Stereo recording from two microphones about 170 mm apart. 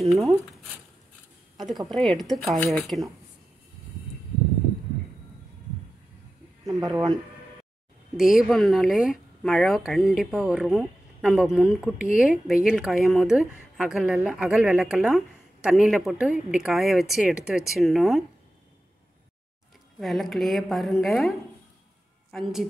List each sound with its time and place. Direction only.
0.1 s speech: centre (ahead or behind)
1.6 s speech: centre (ahead or behind)
6.7 s speech: 20° right (ahead or behind)
8.2 s speech: 5° right (ahead or behind)
20.0 s speech: centre (ahead or behind)